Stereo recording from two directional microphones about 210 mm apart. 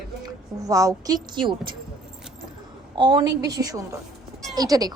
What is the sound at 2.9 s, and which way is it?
Speech, 20° right (ahead or behind).